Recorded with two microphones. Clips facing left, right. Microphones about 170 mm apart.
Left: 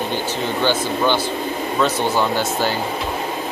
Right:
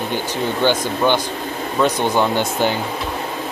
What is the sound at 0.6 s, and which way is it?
Speech, 15° right (ahead or behind).